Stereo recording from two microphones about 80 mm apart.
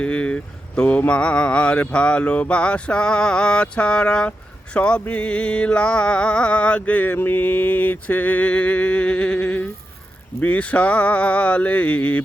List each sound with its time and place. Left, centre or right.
0.0 s speech: centre
0.8 s mantra: centre